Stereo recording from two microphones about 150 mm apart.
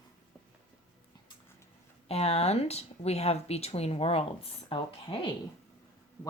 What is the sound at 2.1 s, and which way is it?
Speech, 45° left (ahead or behind).